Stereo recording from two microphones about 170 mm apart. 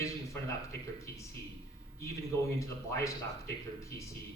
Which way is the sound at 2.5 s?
15° left (ahead or behind).